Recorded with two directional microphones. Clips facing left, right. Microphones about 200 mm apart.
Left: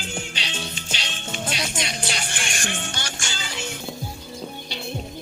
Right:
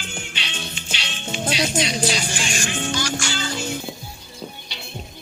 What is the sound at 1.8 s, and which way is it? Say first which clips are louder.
Music: right 7 dB; 55° left (ahead or behind).